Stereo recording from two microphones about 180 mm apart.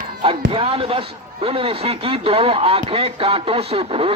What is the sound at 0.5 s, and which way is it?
Speech, 30° right (ahead or behind).